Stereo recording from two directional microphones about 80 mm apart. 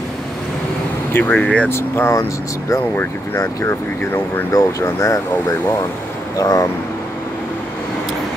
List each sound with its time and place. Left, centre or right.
1.1 s speech: left
1.7 s speech: left